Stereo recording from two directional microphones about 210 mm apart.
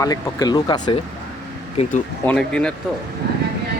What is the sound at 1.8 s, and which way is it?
Speech, 35° left (ahead or behind).